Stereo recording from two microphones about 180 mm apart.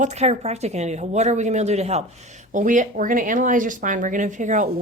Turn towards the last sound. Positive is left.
turn(degrees=-45)  # may be behind; listen again after turning